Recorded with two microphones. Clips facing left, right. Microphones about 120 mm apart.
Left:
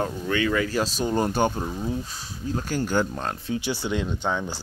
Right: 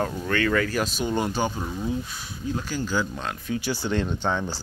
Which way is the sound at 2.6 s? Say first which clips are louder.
Left 4 dB; 55° left (ahead or behind).